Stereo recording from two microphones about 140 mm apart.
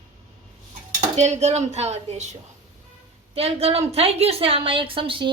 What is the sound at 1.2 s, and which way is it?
A woman's voice, 55° right (ahead or behind).